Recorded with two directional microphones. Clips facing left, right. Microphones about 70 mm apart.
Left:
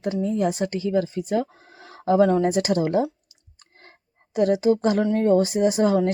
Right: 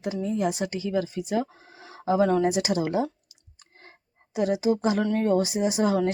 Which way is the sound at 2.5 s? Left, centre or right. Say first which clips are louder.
Left 4 dB; left.